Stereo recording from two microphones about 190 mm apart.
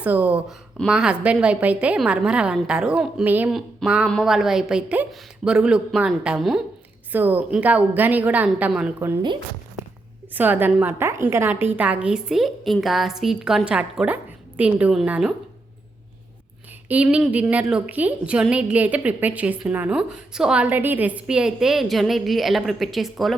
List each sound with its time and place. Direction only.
0.0 s a woman's voice: 5° right (ahead or behind)
9.2 s speech: 25° right (ahead or behind)
10.3 s a woman's voice: 10° right (ahead or behind)
16.9 s a woman's voice: 5° right (ahead or behind)